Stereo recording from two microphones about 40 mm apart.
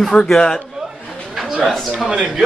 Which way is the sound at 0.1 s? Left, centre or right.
Left.